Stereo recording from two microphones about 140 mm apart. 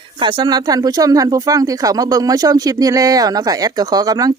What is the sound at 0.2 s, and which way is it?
Speech, 35° right (ahead or behind).